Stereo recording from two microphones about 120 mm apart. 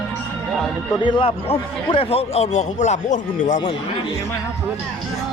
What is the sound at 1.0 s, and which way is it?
A man's voice, 50° left (ahead or behind).